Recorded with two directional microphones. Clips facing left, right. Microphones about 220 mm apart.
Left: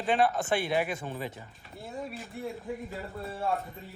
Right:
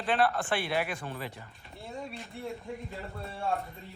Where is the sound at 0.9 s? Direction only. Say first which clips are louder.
Left 2 dB; 20° left (ahead or behind).